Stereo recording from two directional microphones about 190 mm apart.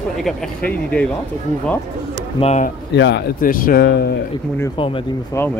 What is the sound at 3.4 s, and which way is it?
Speech, 45° left (ahead or behind).